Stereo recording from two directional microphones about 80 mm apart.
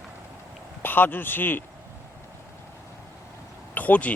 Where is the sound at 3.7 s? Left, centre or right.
Centre.